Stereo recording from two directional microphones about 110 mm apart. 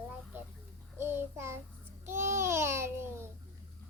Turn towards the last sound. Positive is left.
turn(degrees=-25)  # may be behind; listen again after turning